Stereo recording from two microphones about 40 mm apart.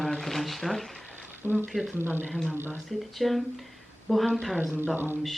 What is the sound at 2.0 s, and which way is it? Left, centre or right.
Speech, right.